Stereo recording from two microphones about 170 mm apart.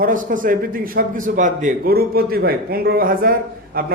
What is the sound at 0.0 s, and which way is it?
A man's voice, 50° right (ahead or behind).